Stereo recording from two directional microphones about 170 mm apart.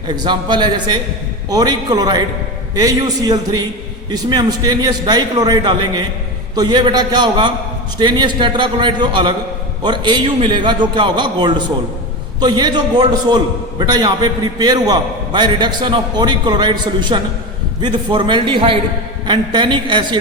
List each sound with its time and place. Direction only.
0.2 s a man's voice: 25° right (ahead or behind)